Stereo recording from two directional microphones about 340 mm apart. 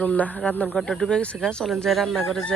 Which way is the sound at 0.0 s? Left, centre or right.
Centre.